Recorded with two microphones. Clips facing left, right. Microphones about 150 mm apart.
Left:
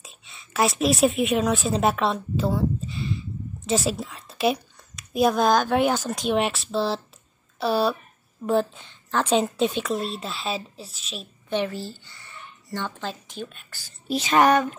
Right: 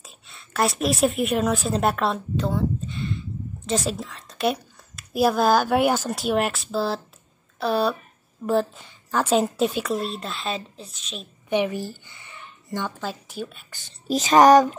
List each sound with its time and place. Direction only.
0.0 s a woman's voice: centre (ahead or behind)
11.4 s speech: 15° right (ahead or behind)
14.0 s female singing: 40° right (ahead or behind)